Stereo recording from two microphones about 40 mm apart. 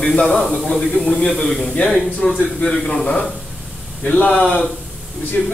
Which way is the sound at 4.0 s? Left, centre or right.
Left.